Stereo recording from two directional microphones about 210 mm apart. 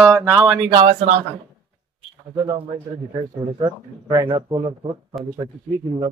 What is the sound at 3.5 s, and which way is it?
A man's voice, 20° right (ahead or behind).